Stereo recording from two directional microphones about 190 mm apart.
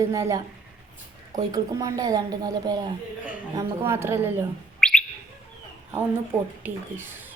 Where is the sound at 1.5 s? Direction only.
20° right (ahead or behind).